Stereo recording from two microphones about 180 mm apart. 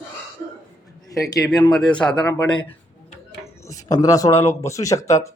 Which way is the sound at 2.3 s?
25° left (ahead or behind).